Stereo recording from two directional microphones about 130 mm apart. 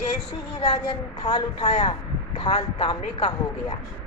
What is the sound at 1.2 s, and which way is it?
Speech, 35° left (ahead or behind).